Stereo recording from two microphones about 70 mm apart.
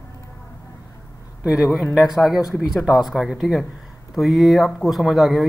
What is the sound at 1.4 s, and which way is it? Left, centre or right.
A man's voice, centre.